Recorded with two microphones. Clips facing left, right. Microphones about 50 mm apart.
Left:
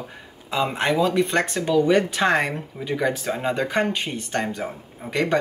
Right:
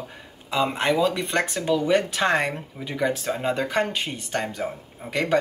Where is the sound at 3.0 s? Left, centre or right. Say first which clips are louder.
Right 1 dB; centre.